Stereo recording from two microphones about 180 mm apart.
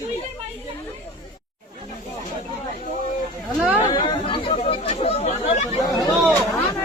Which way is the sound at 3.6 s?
5° right (ahead or behind).